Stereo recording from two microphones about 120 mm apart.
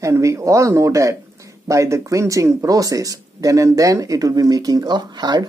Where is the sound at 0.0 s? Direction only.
25° right (ahead or behind).